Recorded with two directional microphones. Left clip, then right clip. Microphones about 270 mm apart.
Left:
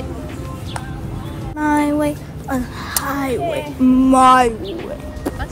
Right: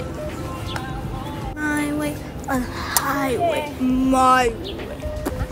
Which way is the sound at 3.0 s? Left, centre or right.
Centre.